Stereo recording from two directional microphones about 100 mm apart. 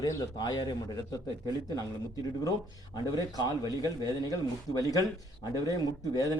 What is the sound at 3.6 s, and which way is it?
Speech, 35° right (ahead or behind).